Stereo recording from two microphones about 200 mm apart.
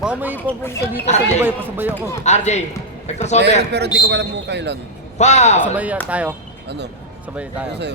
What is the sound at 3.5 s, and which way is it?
Speech, 55° right (ahead or behind).